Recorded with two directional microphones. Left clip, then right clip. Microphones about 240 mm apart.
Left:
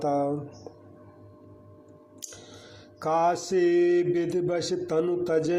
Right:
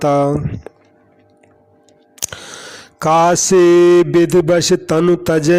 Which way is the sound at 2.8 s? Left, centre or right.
Right.